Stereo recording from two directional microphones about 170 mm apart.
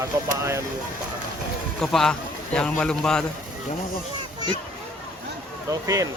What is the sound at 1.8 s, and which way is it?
A man's voice, centre (ahead or behind).